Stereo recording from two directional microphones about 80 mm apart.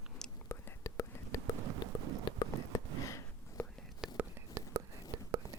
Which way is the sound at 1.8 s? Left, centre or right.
Left.